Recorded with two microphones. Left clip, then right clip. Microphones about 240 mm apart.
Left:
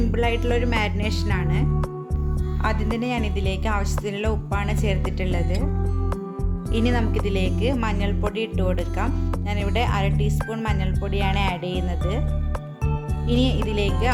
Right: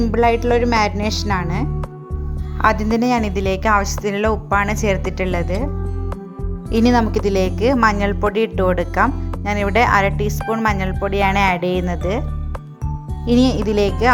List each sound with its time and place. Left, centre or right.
0.0 s speech: centre
6.8 s speech: right
13.2 s speech: right